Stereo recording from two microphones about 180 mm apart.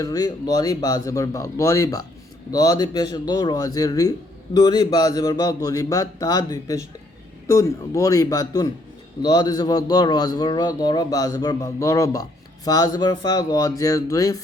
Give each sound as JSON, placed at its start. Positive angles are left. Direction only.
{"t": 0.0, "sound": "a man's voice", "side_deg": 20}